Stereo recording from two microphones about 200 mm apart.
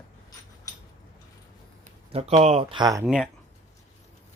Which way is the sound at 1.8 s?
30° right (ahead or behind).